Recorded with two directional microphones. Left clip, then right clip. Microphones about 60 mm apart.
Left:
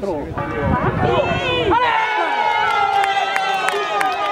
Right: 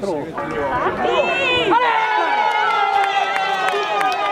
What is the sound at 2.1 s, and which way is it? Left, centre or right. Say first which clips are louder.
Run: right 1 dB; left.